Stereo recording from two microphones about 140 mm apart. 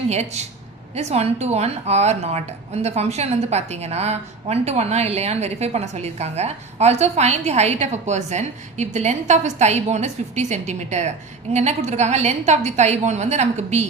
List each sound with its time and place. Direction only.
0.1 s a woman's voice: 50° right (ahead or behind)